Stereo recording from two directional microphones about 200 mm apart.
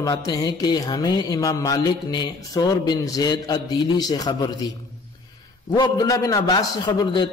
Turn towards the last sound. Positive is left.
turn(degrees=25)  # may be behind; listen again after turning